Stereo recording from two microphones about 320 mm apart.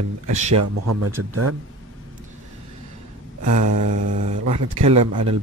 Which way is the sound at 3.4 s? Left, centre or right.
Right.